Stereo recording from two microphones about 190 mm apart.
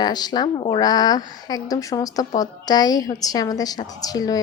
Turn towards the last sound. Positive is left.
turn(degrees=20)  # may be behind; listen again after turning